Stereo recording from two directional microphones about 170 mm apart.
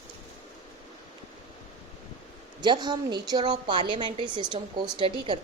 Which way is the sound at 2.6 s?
25° right (ahead or behind).